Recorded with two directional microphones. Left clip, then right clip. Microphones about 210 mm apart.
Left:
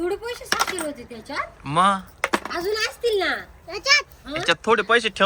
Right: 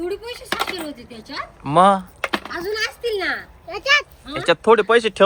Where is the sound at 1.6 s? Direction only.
Centre (ahead or behind).